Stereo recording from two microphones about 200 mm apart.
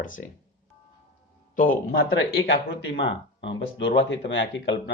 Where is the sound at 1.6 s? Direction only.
45° left (ahead or behind).